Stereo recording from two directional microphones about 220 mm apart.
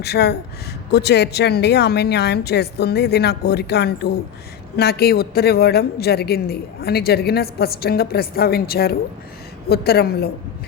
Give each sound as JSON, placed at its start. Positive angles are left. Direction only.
{"t": 0.0, "sound": "a woman's voice", "side_deg": 50}